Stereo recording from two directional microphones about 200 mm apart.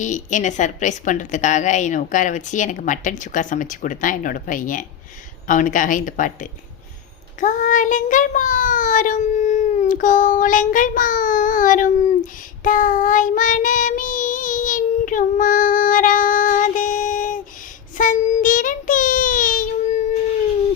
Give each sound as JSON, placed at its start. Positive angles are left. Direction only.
{"t": 0.0, "sound": "a woman's voice", "side_deg": 40}
{"t": 7.3, "sound": "child singing", "side_deg": 40}